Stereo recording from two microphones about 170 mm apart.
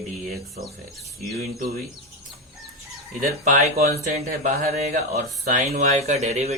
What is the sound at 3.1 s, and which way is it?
Speech, 50° right (ahead or behind).